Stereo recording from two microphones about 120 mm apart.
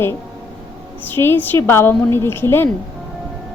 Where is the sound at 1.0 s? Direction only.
20° left (ahead or behind).